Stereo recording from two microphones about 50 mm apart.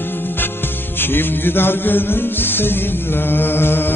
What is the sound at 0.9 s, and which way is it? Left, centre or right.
Music, left.